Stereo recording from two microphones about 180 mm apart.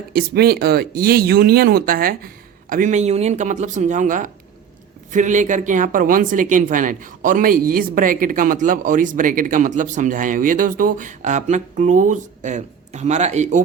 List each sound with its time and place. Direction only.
0.1 s speech: 60° right (ahead or behind); by 13.6 s 40° right (ahead or behind)